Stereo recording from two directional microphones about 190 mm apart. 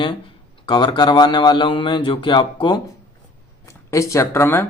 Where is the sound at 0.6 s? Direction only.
25° left (ahead or behind).